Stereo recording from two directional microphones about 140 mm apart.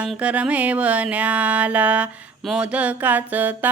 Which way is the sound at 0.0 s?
10° right (ahead or behind).